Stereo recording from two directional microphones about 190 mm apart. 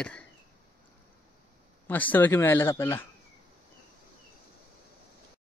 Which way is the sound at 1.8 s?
10° left (ahead or behind).